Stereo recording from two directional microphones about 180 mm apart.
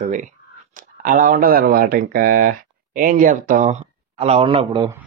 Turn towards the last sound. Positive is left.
turn(degrees=-30)  # may be behind; listen again after turning